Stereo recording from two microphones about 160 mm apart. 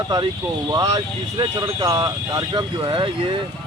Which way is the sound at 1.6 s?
25° right (ahead or behind).